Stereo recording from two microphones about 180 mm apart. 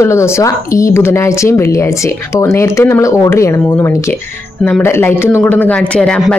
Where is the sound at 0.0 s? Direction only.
15° left (ahead or behind).